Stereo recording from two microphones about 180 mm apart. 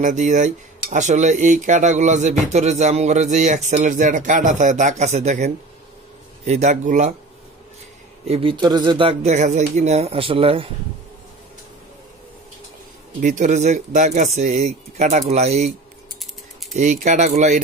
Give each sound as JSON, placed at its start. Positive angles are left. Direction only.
{"t": 0.0, "sound": "speech", "side_deg": -45}
{"t": 8.3, "sound": "speech", "side_deg": -30}
{"t": 13.2, "sound": "speech", "side_deg": -45}
{"t": 16.7, "sound": "speech", "side_deg": -45}